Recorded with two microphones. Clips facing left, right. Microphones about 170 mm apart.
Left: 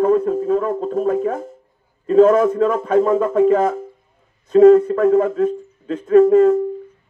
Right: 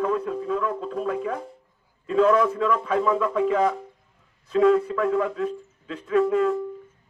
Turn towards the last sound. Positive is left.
turn(degrees=45)  # may be behind; listen again after turning